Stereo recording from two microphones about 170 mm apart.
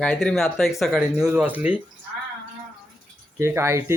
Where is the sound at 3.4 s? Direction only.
15° right (ahead or behind).